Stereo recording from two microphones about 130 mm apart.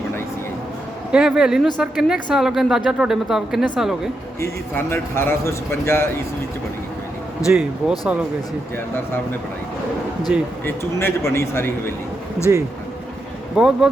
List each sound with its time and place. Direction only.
1.1 s speech: 5° right (ahead or behind)
4.4 s a man's voice: 20° left (ahead or behind)
7.5 s speech: 5° right (ahead or behind)
10.3 s speech: 10° right (ahead or behind)
10.7 s a man's voice: 20° left (ahead or behind)
13.6 s speech: 5° right (ahead or behind)